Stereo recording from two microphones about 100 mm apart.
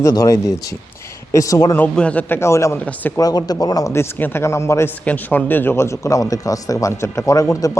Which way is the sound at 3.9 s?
25° left (ahead or behind).